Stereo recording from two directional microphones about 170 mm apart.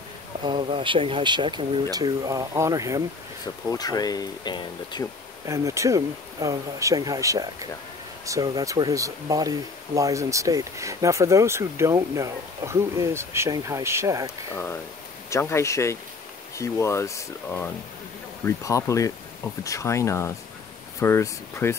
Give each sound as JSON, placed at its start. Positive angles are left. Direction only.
{"t": 0.4, "sound": "speech", "side_deg": -25}
{"t": 3.7, "sound": "speech", "side_deg": 20}
{"t": 5.5, "sound": "speech", "side_deg": -20}
{"t": 14.5, "sound": "speech", "side_deg": 15}